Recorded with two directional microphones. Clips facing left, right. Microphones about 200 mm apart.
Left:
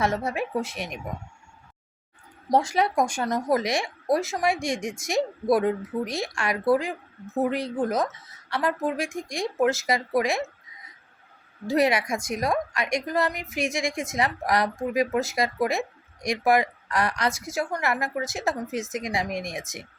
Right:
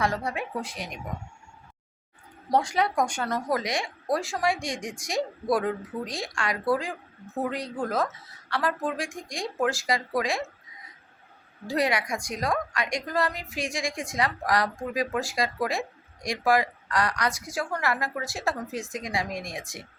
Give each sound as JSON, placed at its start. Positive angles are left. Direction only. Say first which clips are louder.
{"t": 0.0, "sound": "speech", "louder": "left 3 dB", "side_deg": 25}
{"t": 2.5, "sound": "speech", "louder": "left 2 dB", "side_deg": 25}
{"t": 11.7, "sound": "speech", "louder": "left 4 dB", "side_deg": 25}